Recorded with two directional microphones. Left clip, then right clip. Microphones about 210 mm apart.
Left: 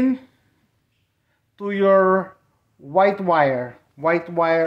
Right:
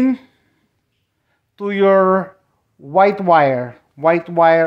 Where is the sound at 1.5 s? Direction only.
45° right (ahead or behind).